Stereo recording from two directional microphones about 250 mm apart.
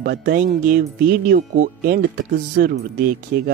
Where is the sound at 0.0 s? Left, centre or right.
Right.